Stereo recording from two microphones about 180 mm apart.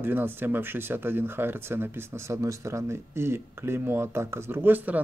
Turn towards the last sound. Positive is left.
turn(degrees=-10)  # may be behind; listen again after turning